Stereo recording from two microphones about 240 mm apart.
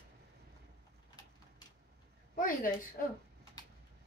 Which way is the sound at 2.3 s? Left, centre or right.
Left.